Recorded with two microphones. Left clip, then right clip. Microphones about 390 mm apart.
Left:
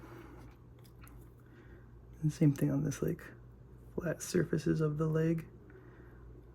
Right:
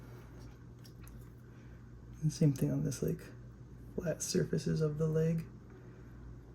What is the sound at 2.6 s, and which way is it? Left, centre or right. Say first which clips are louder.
Speech: left 2 dB; centre.